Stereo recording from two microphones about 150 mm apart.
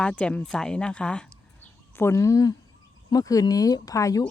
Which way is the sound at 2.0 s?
20° left (ahead or behind).